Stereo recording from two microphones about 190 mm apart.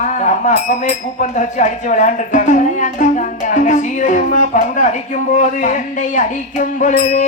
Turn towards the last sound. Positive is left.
turn(degrees=40)  # may be behind; listen again after turning